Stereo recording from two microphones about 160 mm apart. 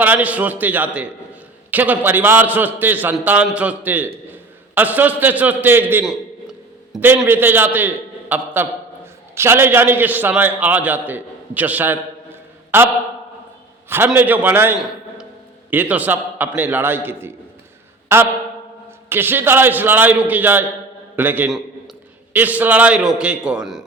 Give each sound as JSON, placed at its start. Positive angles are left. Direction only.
{"t": 0.0, "sound": "a man's voice", "side_deg": -10}
{"t": 13.9, "sound": "a man's voice", "side_deg": -10}